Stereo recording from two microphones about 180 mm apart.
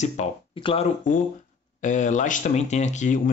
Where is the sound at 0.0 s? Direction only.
35° left (ahead or behind).